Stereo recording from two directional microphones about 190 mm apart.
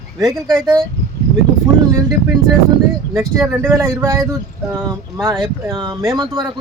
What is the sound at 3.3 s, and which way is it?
Speech, 15° right (ahead or behind).